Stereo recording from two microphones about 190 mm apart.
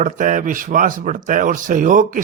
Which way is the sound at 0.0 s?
45° right (ahead or behind).